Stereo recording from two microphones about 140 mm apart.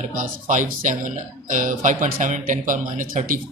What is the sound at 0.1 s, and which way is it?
A man's voice, 65° right (ahead or behind).